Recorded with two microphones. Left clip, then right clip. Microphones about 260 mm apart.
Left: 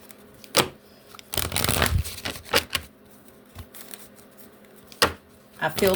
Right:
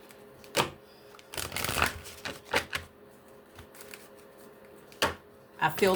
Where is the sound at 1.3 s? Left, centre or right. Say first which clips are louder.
Left 7 dB; left.